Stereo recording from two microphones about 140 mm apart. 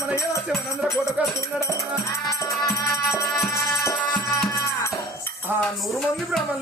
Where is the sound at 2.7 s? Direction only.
20° left (ahead or behind).